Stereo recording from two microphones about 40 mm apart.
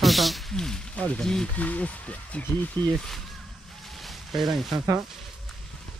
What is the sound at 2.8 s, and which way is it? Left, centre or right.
Speech, left.